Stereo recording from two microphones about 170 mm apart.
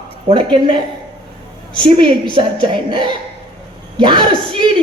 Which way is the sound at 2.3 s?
30° right (ahead or behind).